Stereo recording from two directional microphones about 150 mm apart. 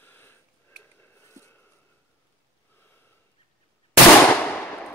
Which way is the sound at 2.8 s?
15° left (ahead or behind).